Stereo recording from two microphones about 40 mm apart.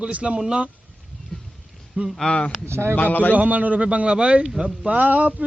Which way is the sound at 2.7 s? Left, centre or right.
Right.